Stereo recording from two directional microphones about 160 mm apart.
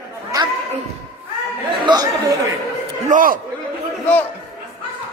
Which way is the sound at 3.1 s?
55° right (ahead or behind).